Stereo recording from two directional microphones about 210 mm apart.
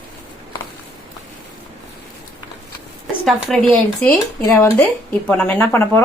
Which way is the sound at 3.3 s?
Centre (ahead or behind).